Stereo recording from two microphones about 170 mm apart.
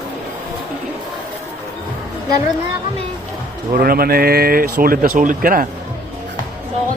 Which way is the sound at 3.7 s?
60° right (ahead or behind).